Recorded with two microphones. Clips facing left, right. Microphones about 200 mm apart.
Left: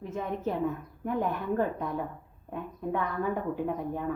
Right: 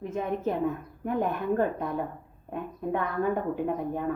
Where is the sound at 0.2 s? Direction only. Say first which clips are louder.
Right 2 dB; 55° right (ahead or behind).